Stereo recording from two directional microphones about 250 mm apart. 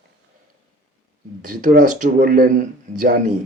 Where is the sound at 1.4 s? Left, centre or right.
Right.